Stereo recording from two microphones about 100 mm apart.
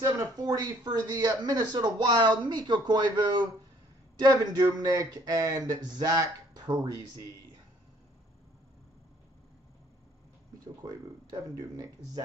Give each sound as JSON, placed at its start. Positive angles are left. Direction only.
{"t": 0.0, "sound": "speech", "side_deg": -40}
{"t": 10.8, "sound": "speech", "side_deg": -40}